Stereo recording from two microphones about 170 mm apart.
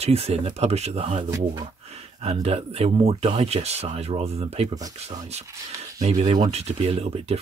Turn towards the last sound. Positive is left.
turn(degrees=-35)  # may be behind; listen again after turning